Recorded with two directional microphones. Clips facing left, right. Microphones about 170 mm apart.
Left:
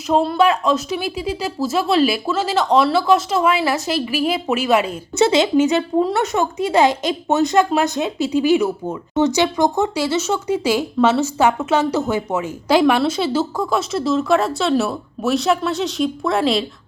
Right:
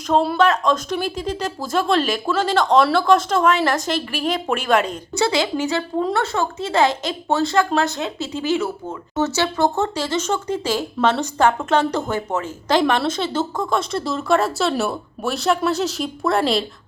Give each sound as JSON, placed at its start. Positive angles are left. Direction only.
{"t": 0.3, "sound": "speech", "side_deg": 10}
{"t": 5.1, "sound": "speech", "side_deg": 20}